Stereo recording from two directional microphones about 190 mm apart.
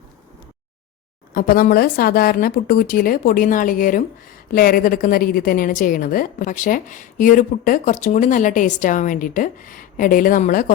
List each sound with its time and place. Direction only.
1.3 s a woman's voice: 50° left (ahead or behind)